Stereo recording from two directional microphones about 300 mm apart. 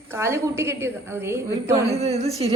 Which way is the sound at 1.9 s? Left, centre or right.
Right.